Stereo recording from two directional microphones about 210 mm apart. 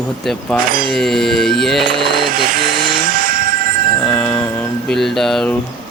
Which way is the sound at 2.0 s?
45° right (ahead or behind).